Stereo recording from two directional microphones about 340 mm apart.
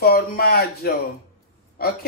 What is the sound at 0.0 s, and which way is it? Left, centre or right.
Speech, left.